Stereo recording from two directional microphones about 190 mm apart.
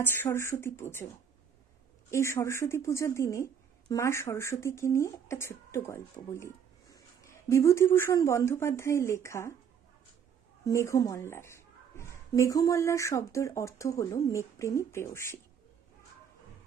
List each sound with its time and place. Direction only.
0.0 s a woman's voice: 10° left (ahead or behind)
2.0 s a woman's voice: 15° left (ahead or behind)
10.7 s a woman's voice: 15° left (ahead or behind)